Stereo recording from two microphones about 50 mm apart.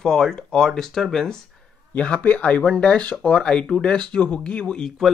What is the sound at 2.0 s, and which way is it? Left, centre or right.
Speech, left.